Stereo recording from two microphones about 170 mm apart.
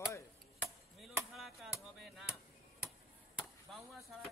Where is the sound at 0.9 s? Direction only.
Centre (ahead or behind).